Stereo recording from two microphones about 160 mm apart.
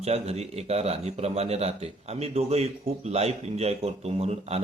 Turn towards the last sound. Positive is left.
turn(degrees=-40)  # may be behind; listen again after turning